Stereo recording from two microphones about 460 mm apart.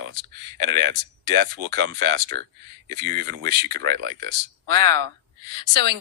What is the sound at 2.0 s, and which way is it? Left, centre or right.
Speech, right.